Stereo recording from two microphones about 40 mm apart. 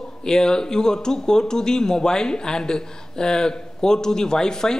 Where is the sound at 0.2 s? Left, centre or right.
Centre.